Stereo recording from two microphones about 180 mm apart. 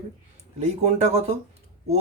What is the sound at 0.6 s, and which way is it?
Speech, 40° right (ahead or behind).